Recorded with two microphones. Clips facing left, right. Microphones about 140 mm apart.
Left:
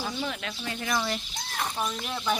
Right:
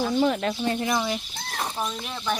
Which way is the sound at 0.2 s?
40° right (ahead or behind).